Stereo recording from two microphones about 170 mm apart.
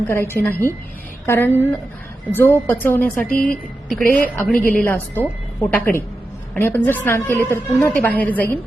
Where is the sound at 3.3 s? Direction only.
55° left (ahead or behind).